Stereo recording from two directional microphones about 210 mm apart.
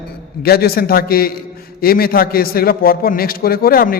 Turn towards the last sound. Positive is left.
turn(degrees=45)  # may be behind; listen again after turning